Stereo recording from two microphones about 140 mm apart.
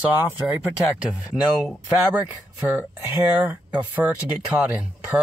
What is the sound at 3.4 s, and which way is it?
Speech, 10° right (ahead or behind).